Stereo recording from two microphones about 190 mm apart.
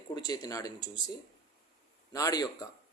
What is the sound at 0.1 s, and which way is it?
Speech, 20° left (ahead or behind).